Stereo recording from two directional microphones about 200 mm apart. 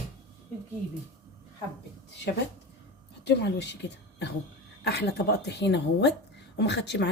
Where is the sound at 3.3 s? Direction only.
60° left (ahead or behind).